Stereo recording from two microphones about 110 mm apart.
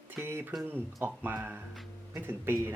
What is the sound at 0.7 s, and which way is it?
Speech, 20° right (ahead or behind).